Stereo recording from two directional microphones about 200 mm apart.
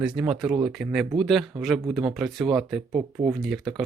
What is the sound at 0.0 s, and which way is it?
Speech, 5° right (ahead or behind).